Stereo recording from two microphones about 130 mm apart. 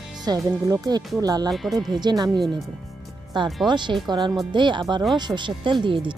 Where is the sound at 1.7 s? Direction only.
35° right (ahead or behind).